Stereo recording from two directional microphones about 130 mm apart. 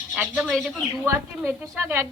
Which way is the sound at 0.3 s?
Centre (ahead or behind).